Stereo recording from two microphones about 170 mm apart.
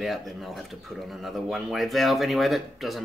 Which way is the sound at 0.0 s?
Centre (ahead or behind).